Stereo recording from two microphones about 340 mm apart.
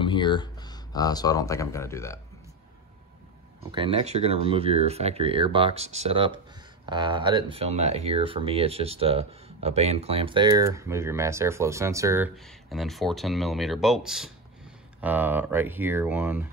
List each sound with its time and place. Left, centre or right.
0.0 s speech: centre
3.7 s speech: centre